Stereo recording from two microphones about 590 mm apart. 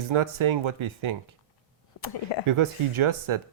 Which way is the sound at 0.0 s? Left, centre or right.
Right.